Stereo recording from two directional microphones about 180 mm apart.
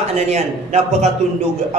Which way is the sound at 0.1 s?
40° right (ahead or behind).